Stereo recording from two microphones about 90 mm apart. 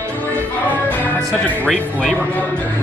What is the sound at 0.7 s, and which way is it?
Music, 20° left (ahead or behind).